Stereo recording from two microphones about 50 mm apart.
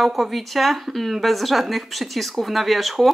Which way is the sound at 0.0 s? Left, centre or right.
Centre.